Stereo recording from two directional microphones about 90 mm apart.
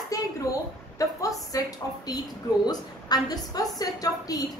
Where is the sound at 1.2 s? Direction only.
40° left (ahead or behind).